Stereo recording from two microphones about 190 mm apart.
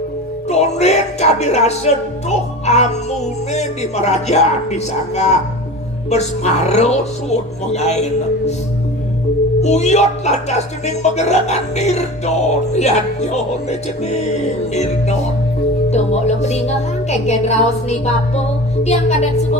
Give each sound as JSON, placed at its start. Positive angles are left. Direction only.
{"t": 0.4, "sound": "speech", "side_deg": 35}
{"t": 9.6, "sound": "speech", "side_deg": 35}